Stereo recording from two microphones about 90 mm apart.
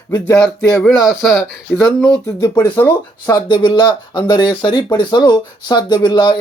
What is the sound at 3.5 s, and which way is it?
Speech, 65° left (ahead or behind).